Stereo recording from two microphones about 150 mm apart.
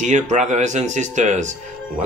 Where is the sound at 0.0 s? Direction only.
50° right (ahead or behind).